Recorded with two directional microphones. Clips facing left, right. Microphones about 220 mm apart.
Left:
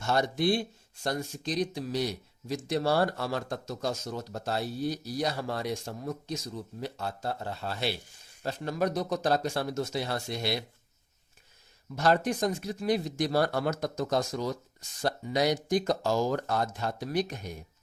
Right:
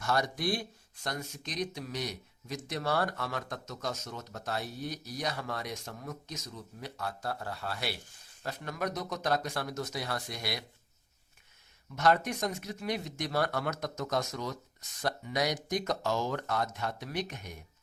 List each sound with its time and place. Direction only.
0.0 s a man's voice: 25° left (ahead or behind)
11.9 s speech: 30° left (ahead or behind)